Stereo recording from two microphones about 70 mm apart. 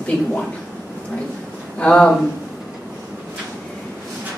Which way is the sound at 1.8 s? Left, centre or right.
Centre.